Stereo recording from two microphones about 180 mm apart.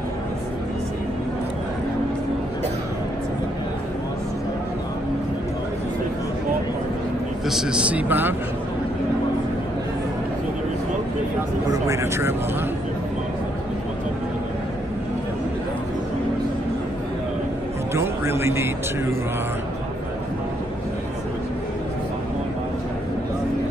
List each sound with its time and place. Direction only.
7.4 s speech: 5° right (ahead or behind)
11.7 s speech: 15° right (ahead or behind)
17.9 s music: 15° right (ahead or behind)